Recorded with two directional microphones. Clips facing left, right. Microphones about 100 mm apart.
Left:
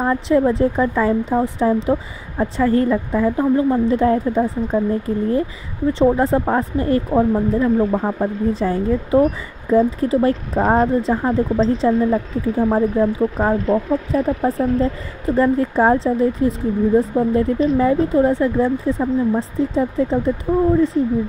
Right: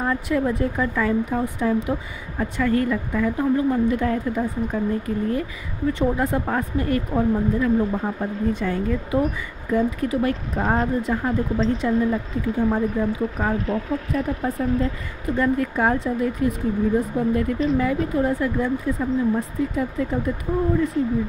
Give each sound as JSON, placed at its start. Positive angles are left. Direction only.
{"t": 0.0, "sound": "speech", "side_deg": 30}